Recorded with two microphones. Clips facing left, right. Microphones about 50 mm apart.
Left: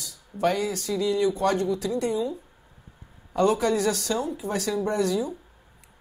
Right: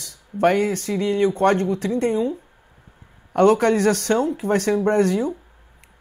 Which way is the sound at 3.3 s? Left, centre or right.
Right.